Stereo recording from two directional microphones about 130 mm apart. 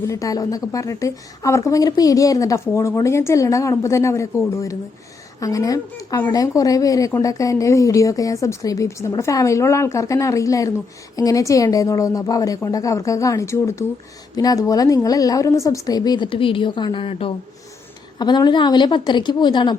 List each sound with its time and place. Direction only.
0.1 s a woman's voice: 25° left (ahead or behind); by 17.3 s 45° left (ahead or behind)
18.2 s a woman's voice: 35° left (ahead or behind)